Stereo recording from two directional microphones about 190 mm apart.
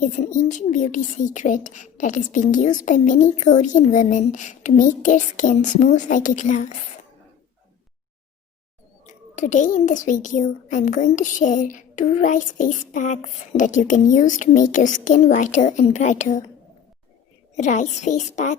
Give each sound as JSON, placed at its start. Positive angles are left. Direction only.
{"t": 0.0, "sound": "a child's voice", "side_deg": 40}
{"t": 9.0, "sound": "a child's voice", "side_deg": 40}
{"t": 17.6, "sound": "a child's voice", "side_deg": 40}